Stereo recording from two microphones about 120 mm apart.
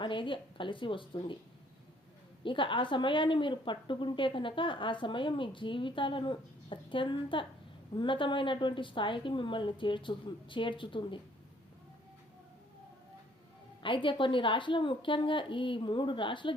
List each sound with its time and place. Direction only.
0.0 s a woman's voice: 45° left (ahead or behind)
2.4 s a woman's voice: 45° left (ahead or behind)
13.8 s a woman's voice: 45° left (ahead or behind)